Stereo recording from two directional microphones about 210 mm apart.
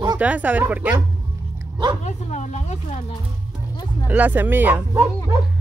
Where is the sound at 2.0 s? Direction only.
35° left (ahead or behind).